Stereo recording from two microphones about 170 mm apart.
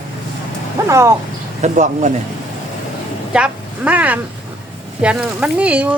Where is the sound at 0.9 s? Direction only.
15° right (ahead or behind).